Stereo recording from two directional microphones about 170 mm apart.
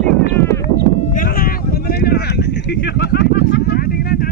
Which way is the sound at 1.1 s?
55° left (ahead or behind).